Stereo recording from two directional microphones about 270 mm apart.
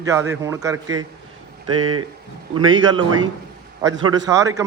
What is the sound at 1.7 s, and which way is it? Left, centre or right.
Speech, right.